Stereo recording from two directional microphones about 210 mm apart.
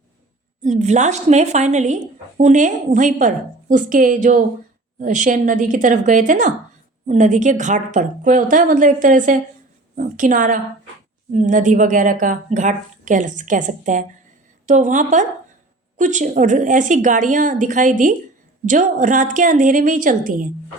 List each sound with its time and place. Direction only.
0.6 s speech: 35° right (ahead or behind)